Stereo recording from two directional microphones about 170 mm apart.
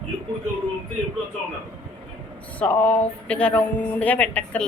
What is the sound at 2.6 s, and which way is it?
Speech, 10° left (ahead or behind).